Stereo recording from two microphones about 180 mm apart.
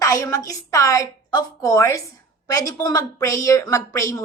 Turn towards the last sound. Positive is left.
turn(degrees=15)  # may be behind; listen again after turning